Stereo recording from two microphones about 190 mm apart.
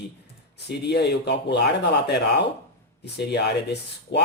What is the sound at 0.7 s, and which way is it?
Speech, 60° left (ahead or behind).